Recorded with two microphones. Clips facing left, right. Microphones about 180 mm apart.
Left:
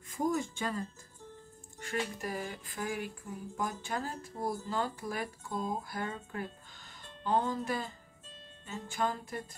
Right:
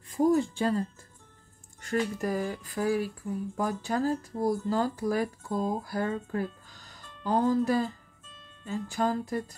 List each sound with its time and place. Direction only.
0.1 s speech: 35° right (ahead or behind)